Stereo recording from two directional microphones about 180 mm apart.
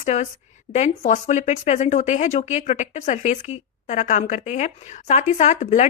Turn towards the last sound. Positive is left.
turn(degrees=40)  # may be behind; listen again after turning